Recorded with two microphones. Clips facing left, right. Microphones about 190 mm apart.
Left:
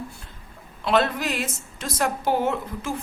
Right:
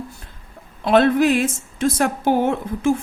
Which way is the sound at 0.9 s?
55° right (ahead or behind).